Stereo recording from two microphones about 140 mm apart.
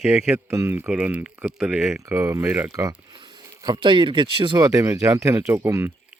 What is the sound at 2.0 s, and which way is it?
Speech, 25° right (ahead or behind).